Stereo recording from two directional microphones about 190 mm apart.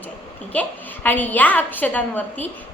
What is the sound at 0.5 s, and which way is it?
A woman's voice, 10° left (ahead or behind).